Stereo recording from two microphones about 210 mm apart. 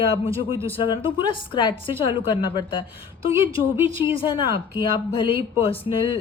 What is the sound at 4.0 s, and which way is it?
Speech, 25° left (ahead or behind).